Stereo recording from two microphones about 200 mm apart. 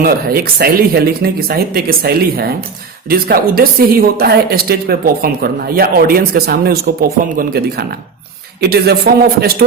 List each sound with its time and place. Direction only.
0.0 s a woman's voice: 50° right (ahead or behind)